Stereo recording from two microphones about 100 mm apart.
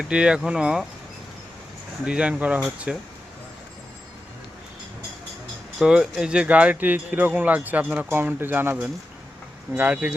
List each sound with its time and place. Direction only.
0.0 s speech: 10° right (ahead or behind)
2.0 s speech: 10° right (ahead or behind)
5.8 s speech: 10° right (ahead or behind)